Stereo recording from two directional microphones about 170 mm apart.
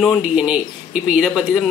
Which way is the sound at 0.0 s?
Centre (ahead or behind).